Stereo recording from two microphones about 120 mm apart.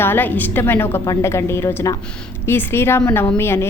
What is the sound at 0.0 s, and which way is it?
A woman's voice, 15° left (ahead or behind).